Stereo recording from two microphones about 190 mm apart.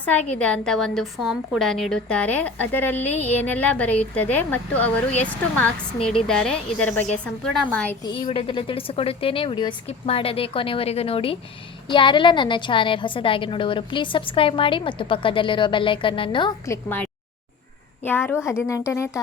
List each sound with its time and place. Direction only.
0.3 s a woman's voice: 5° left (ahead or behind)
8.3 s a woman's voice: 30° left (ahead or behind)
16.6 s a woman's voice: 10° left (ahead or behind)